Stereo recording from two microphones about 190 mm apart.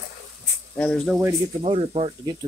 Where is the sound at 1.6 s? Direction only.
30° right (ahead or behind).